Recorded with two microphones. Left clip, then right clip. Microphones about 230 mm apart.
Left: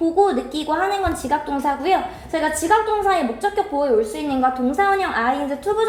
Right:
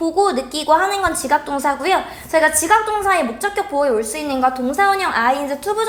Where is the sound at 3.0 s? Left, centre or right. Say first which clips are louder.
Right 2 dB; right.